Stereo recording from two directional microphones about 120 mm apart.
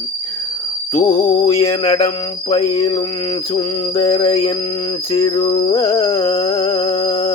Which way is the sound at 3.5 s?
45° left (ahead or behind).